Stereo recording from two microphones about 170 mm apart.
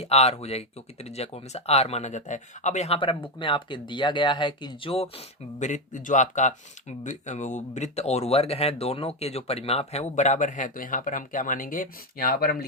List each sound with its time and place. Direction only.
0.0 s speech: 40° left (ahead or behind); by 12.6 s 65° left (ahead or behind)